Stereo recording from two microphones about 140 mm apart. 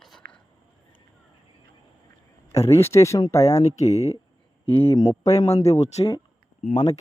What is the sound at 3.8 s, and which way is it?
Speech, 50° left (ahead or behind).